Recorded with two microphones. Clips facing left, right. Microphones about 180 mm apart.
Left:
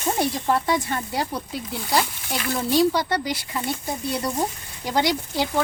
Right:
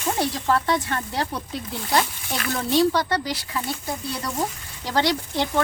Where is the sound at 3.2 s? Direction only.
55° left (ahead or behind).